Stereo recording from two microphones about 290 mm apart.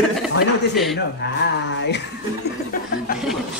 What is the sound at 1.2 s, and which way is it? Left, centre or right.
Speech, left.